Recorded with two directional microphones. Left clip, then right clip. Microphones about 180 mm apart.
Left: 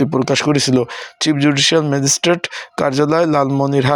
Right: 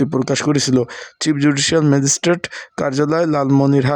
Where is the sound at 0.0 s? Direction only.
20° right (ahead or behind).